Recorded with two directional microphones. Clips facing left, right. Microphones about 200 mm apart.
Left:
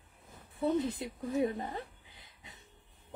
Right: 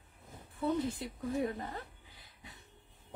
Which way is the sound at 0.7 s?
20° left (ahead or behind).